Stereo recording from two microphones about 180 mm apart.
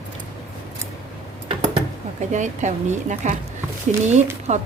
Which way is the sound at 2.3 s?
40° right (ahead or behind).